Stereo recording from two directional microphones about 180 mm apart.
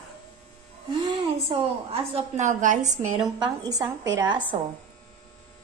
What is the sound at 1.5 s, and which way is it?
A woman's voice, 35° right (ahead or behind).